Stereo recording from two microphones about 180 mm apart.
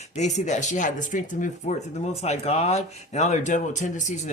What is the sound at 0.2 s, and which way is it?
Speech, 40° left (ahead or behind).